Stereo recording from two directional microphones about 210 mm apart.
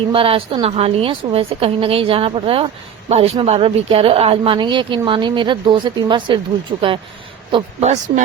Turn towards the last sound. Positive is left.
turn(degrees=-30)  # may be behind; listen again after turning